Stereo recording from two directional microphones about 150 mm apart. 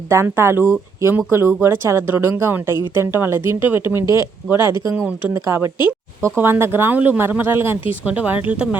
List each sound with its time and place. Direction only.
0.1 s speech: 15° right (ahead or behind)